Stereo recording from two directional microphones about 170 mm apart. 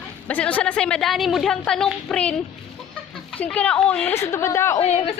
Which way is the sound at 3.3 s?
5° left (ahead or behind).